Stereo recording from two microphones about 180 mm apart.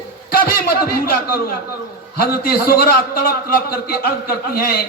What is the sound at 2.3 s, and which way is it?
A man's voice, 60° left (ahead or behind).